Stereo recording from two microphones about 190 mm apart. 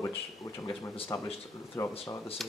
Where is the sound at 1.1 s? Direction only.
15° left (ahead or behind).